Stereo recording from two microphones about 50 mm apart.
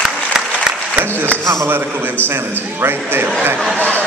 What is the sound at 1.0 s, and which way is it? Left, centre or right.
A man's voice, right.